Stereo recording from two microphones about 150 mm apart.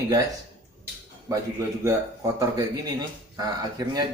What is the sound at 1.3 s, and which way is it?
Speech, 20° right (ahead or behind).